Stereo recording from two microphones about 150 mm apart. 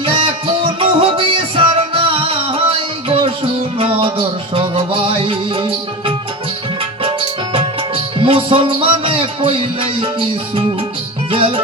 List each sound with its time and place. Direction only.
0.0 s music: 35° right (ahead or behind)
8.2 s music: 35° right (ahead or behind)